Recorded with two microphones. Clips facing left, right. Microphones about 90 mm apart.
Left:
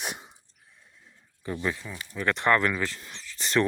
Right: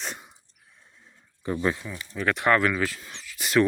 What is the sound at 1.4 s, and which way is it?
Speech, 25° right (ahead or behind).